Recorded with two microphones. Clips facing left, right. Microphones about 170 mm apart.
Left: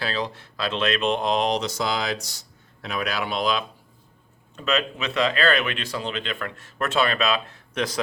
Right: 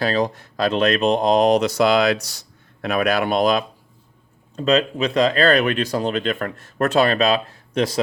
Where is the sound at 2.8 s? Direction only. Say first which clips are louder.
Right 8 dB; 55° right (ahead or behind).